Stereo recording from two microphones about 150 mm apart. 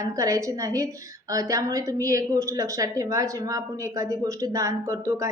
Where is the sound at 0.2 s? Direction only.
20° right (ahead or behind).